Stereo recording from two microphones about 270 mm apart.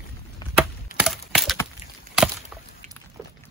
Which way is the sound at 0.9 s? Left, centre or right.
Centre.